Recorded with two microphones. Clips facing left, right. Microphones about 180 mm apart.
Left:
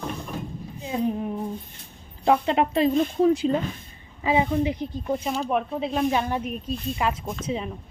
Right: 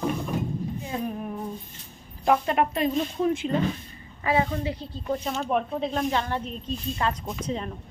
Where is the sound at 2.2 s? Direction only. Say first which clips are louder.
Left 2 dB; 25° left (ahead or behind).